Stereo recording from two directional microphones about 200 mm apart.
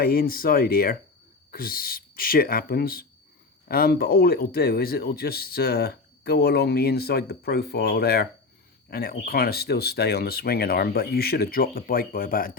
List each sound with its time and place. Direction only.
0.0 s speech: 50° left (ahead or behind)